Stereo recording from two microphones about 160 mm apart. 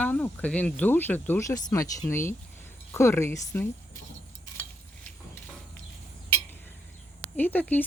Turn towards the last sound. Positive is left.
turn(degrees=10)  # may be behind; listen again after turning